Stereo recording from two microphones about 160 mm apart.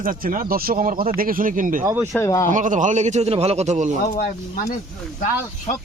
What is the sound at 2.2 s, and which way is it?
Speech, 20° left (ahead or behind).